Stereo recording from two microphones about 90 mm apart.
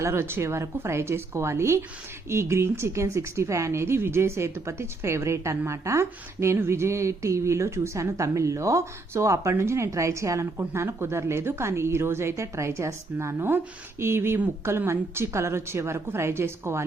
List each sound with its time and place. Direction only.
0.0 s a woman's voice: 30° right (ahead or behind)